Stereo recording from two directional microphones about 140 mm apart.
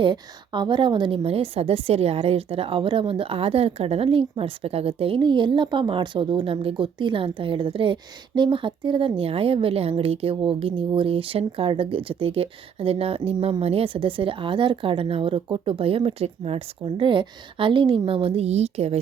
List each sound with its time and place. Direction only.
0.0 s speech: 35° right (ahead or behind)